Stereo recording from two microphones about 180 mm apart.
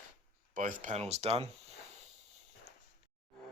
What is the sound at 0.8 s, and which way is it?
Speech, 40° right (ahead or behind).